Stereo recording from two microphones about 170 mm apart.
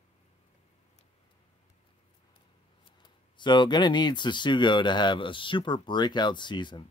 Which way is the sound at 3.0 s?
25° left (ahead or behind).